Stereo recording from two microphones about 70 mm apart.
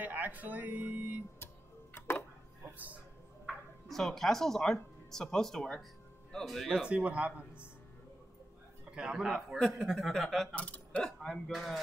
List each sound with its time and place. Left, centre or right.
0.0 s speech: right
2.0 s tick-tock: left
3.4 s speech: centre
6.9 s a man's voice: centre
8.9 s speech: centre
10.5 s creak: centre
11.5 s speech: centre